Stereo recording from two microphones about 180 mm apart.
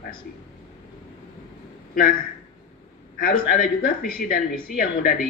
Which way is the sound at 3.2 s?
50° left (ahead or behind).